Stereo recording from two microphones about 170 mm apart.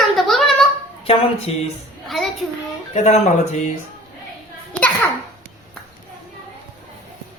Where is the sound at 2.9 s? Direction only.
40° left (ahead or behind).